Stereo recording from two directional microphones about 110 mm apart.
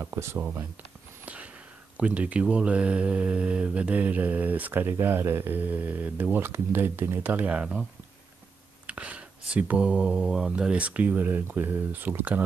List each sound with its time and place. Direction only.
0.0 s speech: 25° right (ahead or behind)
1.2 s a sound: 10° right (ahead or behind)
2.0 s speech: 10° right (ahead or behind)
8.8 s speech: 10° right (ahead or behind)